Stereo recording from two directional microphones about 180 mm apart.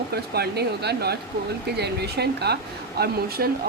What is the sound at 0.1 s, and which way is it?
Speech, 65° right (ahead or behind).